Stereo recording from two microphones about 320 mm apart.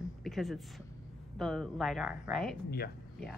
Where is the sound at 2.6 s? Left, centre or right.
Left.